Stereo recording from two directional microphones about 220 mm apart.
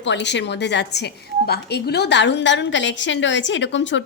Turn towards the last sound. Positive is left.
turn(degrees=55)  # may be behind; listen again after turning